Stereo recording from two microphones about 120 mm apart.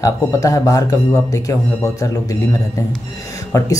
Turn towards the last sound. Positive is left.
turn(degrees=30)  # may be behind; listen again after turning